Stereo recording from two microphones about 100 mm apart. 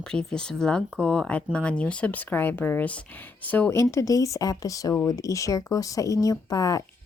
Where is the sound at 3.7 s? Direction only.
30° left (ahead or behind).